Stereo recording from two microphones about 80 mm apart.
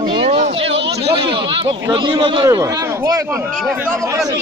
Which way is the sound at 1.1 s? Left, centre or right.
Right.